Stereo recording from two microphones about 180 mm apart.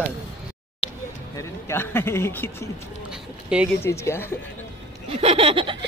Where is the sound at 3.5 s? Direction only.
5° right (ahead or behind).